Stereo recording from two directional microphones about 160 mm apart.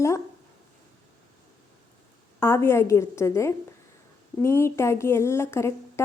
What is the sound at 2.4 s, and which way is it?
Speech, 15° left (ahead or behind).